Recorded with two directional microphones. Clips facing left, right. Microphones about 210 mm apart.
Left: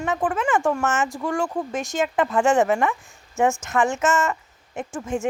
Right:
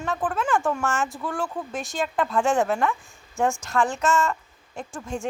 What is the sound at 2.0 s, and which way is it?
A woman's voice, centre (ahead or behind).